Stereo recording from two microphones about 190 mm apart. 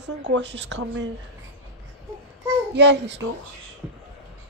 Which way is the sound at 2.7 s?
65° right (ahead or behind).